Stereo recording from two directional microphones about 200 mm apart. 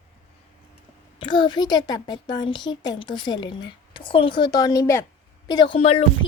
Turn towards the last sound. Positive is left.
turn(degrees=30)  # may be behind; listen again after turning